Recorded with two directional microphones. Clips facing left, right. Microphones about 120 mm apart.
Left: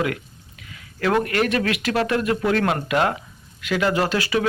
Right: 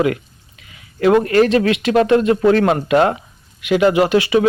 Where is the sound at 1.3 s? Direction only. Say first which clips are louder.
Right 8 dB; 25° right (ahead or behind).